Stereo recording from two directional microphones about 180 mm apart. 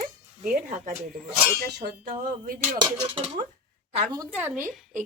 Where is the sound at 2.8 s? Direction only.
30° right (ahead or behind).